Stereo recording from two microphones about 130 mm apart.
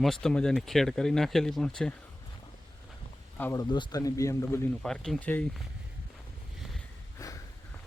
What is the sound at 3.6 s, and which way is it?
Speech, 35° left (ahead or behind).